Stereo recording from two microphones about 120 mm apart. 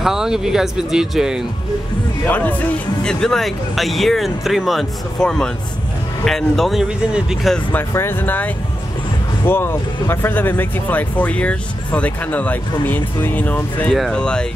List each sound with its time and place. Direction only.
0.0 s speech: 5° right (ahead or behind)
2.2 s speech: 15° left (ahead or behind); by 7.5 s 5° right (ahead or behind)
7.9 s speech: 20° left (ahead or behind)
9.5 s speech: 20° left (ahead or behind)